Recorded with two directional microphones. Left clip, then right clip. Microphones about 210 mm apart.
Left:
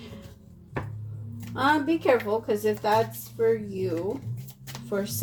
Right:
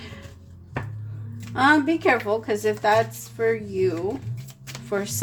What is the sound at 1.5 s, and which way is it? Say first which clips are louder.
Speech: right 5 dB; 35° right (ahead or behind).